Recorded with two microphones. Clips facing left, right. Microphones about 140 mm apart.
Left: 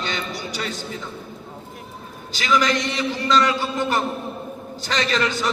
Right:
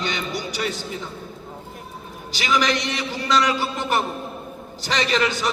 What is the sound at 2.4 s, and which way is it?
A man's voice, 20° right (ahead or behind).